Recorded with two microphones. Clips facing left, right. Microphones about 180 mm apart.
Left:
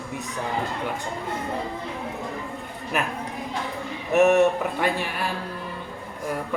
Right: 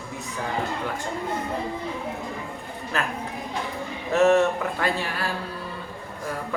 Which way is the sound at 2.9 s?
20° left (ahead or behind).